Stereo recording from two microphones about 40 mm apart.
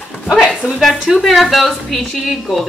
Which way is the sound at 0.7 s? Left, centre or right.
Centre.